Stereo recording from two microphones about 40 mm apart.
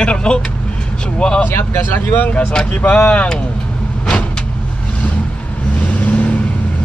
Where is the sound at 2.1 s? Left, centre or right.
Left.